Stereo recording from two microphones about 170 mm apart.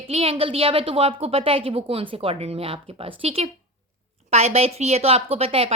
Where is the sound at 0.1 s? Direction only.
35° right (ahead or behind).